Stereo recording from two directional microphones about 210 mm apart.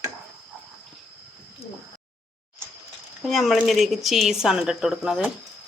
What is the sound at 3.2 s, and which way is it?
Speech, centre (ahead or behind).